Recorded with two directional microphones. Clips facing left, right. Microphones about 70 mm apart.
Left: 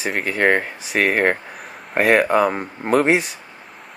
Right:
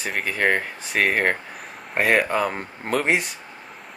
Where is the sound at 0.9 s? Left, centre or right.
Centre.